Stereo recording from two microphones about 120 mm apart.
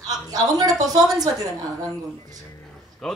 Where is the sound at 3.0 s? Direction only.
Centre (ahead or behind).